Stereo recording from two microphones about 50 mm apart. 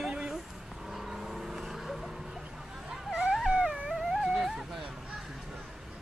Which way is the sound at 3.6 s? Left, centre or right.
Centre.